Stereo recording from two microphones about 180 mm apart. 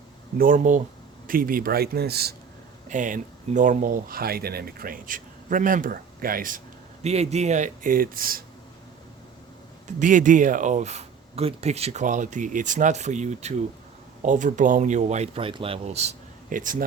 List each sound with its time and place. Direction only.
0.3 s speech: 50° right (ahead or behind)
2.9 s speech: 45° right (ahead or behind)
7.0 s speech: 35° right (ahead or behind); by 8.4 s 55° right (ahead or behind)
10.0 s speech: 45° right (ahead or behind)